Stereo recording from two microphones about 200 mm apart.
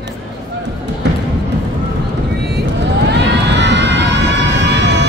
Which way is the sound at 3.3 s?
60° right (ahead or behind).